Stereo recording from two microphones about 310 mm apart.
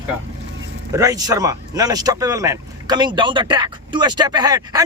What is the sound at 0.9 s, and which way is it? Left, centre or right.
Speech, centre.